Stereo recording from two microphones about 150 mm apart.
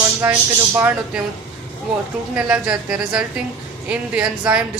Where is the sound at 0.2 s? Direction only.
15° right (ahead or behind).